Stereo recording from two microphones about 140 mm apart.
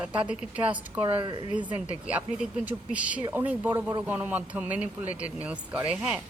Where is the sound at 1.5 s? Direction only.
10° right (ahead or behind).